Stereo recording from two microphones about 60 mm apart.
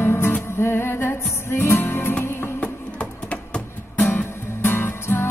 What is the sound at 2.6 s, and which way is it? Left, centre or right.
Music, centre.